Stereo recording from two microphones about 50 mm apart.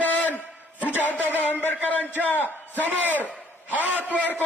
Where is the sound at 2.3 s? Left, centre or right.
Left.